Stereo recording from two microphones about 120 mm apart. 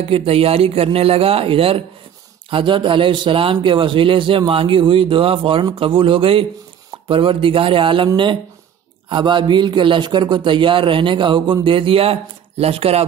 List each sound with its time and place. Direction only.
0.0 s a man's voice: 55° right (ahead or behind)
9.1 s a man's voice: 40° right (ahead or behind); by 13.0 s 55° right (ahead or behind)